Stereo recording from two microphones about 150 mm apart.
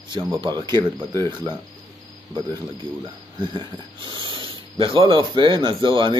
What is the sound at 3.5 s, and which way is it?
Speech, 30° right (ahead or behind).